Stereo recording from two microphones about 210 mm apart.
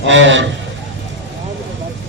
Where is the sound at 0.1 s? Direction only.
60° right (ahead or behind).